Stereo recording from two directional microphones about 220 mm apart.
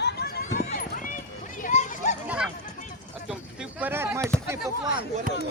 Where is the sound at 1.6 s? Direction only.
35° left (ahead or behind).